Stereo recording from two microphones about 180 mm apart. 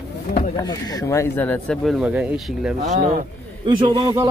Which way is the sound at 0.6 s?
20° left (ahead or behind).